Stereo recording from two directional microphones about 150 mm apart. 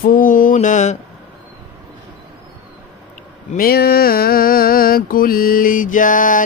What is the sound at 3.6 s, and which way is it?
Mantra, 90° left.